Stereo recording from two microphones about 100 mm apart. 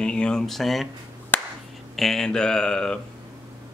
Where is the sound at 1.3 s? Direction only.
20° left (ahead or behind).